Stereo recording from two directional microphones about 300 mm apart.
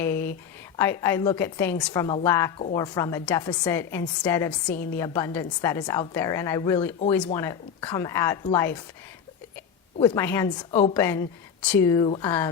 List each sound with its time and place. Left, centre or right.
0.0 s a sound: centre
0.8 s a woman's voice: centre
10.0 s a woman's voice: centre
10.9 s a woman's voice: centre